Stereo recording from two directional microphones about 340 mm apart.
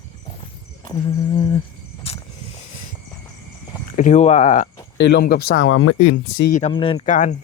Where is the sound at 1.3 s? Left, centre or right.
Centre.